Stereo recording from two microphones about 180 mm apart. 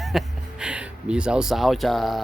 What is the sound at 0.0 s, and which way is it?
Speech, centre (ahead or behind).